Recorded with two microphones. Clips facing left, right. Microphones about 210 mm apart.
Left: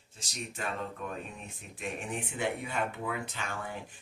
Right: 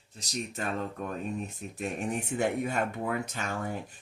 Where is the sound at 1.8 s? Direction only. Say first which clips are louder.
Right 4 dB; 40° right (ahead or behind).